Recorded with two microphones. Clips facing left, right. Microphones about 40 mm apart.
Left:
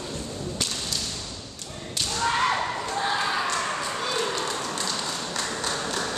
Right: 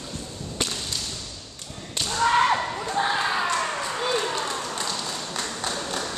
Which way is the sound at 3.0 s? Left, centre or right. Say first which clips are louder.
Right 3 dB; centre.